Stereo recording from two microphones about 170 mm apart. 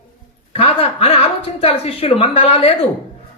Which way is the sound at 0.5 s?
35° left (ahead or behind).